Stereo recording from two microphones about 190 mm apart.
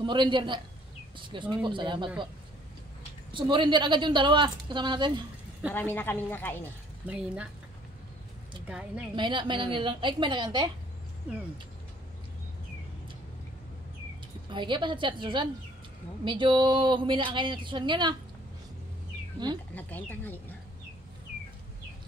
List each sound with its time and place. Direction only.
0.0 s a woman's voice: 25° right (ahead or behind)
3.3 s a woman's voice: 25° right (ahead or behind)
5.8 s speech: 10° left (ahead or behind)
7.1 s speech: 5° right (ahead or behind)
8.6 s speech: 5° right (ahead or behind)
9.1 s a woman's voice: 25° right (ahead or behind)
14.5 s a woman's voice: 25° right (ahead or behind)
19.7 s speech: 10° left (ahead or behind)